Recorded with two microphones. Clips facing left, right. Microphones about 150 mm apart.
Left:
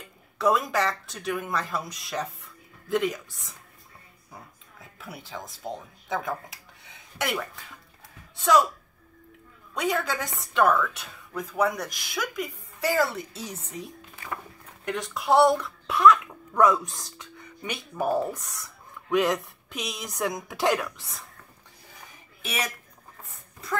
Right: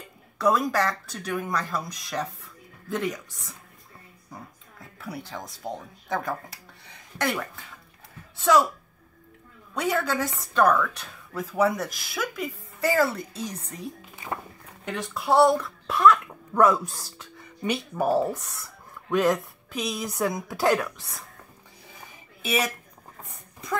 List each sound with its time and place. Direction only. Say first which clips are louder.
0.4 s a woman's voice: right 1 dB; centre (ahead or behind)
5.0 s a woman's voice: right 3 dB; centre (ahead or behind)
8.5 s a woman's voice: right 1 dB; centre (ahead or behind)
9.8 s a woman's voice: right 2 dB; centre (ahead or behind)
14.2 s walk: right 3 dB; 20° right (ahead or behind)
14.9 s a child's voice: left 1 dB; centre (ahead or behind)
22.4 s speech: right 6 dB; 10° right (ahead or behind)